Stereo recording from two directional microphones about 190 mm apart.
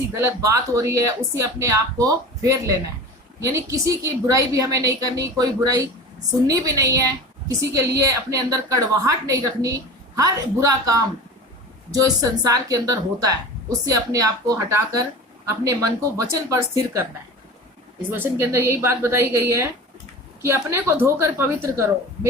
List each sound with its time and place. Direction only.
0.2 s a woman's voice: 15° right (ahead or behind)
18.1 s speech: 10° right (ahead or behind)